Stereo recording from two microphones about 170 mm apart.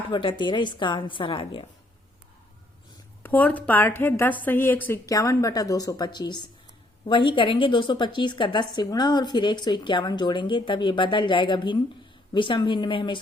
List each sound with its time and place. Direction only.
0.1 s a woman's voice: 30° left (ahead or behind)
3.2 s a woman's voice: 10° left (ahead or behind); by 13.1 s 30° left (ahead or behind)